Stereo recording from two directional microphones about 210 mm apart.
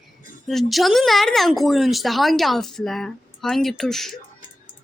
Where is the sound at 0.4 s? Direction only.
Centre (ahead or behind).